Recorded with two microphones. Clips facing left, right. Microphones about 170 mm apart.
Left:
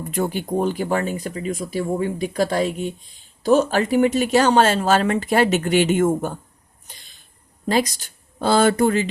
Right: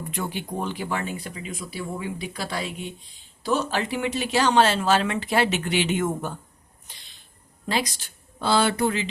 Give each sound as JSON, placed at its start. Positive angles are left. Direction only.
{"t": 0.1, "sound": "speech", "side_deg": 45}
{"t": 6.8, "sound": "a sound", "side_deg": 45}
{"t": 7.7, "sound": "speech", "side_deg": 45}